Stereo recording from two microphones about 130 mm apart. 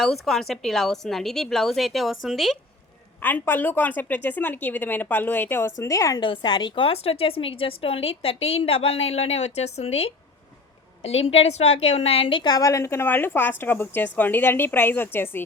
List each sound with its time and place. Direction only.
0.0 s a woman's voice: centre (ahead or behind)
3.2 s a woman's voice: 15° left (ahead or behind)